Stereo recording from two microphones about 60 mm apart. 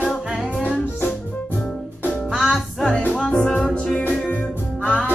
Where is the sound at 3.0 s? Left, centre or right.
Centre.